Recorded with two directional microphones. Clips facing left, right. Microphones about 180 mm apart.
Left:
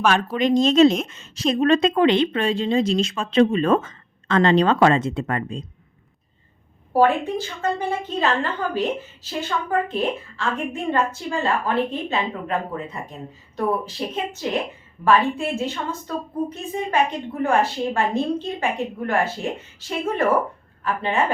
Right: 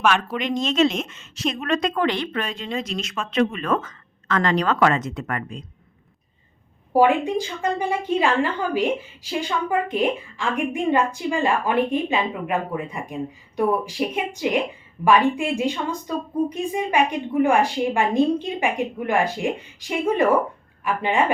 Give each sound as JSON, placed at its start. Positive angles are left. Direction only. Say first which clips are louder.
{"t": 0.0, "sound": "a woman's voice", "louder": "left 2 dB", "side_deg": 35}
{"t": 6.9, "sound": "a woman's voice", "louder": "right 1 dB", "side_deg": -15}